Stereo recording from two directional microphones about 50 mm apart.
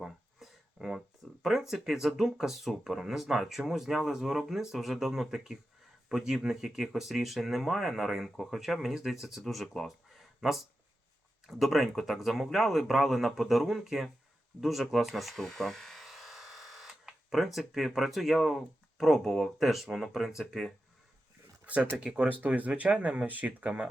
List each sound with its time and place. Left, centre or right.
0.0 s speech: centre
21.7 s speech: right